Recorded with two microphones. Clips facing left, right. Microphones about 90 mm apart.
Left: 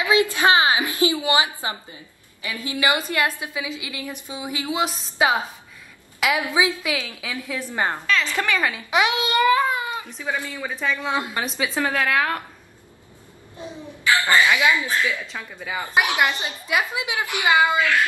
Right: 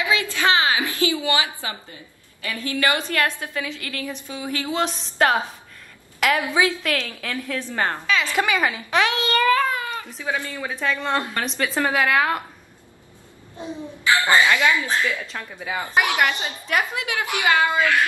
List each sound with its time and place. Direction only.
0.0 s a woman's voice: 20° left (ahead or behind)
8.4 s a woman's voice: 10° right (ahead or behind)
8.9 s a child's voice: 15° left (ahead or behind)
10.0 s speech: centre (ahead or behind)
11.8 s speech: 5° right (ahead or behind)
13.6 s a child's voice: 20° right (ahead or behind)
14.5 s a woman's voice: 15° left (ahead or behind)
15.2 s speech: centre (ahead or behind)
15.9 s a woman's voice: 15° left (ahead or behind)